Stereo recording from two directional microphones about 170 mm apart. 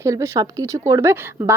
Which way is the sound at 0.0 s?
20° right (ahead or behind).